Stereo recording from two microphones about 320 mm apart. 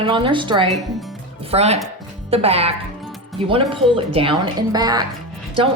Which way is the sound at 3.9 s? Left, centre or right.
Centre.